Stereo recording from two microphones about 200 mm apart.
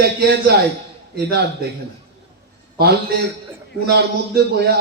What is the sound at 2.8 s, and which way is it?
A man's voice, 50° right (ahead or behind).